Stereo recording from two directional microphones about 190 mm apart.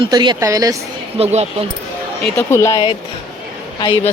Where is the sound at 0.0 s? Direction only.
25° right (ahead or behind).